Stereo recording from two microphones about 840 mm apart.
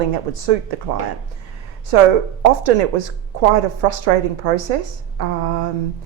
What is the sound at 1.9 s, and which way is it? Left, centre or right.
Speech, right.